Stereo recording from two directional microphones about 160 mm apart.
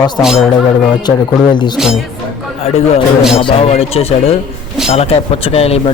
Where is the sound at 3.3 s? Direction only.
40° left (ahead or behind).